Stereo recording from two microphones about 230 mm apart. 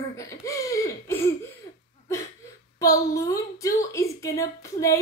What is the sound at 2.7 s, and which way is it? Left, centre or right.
A woman's voice, centre.